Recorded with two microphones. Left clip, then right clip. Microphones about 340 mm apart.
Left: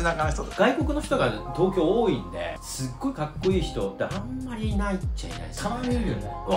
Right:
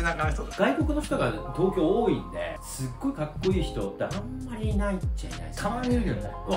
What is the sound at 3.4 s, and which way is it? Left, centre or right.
Speech, centre.